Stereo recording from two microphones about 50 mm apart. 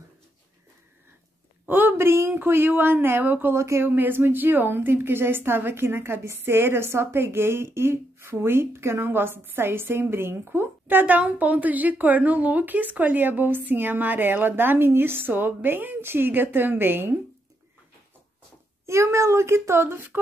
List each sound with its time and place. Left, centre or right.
1.7 s a sound: right
2.0 s a sound: right
2.3 s a woman's voice: right
3.5 s a child's voice: right
3.8 s a woman's voice: right
18.9 s a child's voice: right